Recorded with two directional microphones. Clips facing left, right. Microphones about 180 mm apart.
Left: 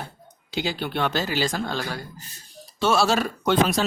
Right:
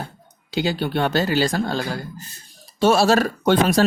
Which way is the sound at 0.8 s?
45° right (ahead or behind).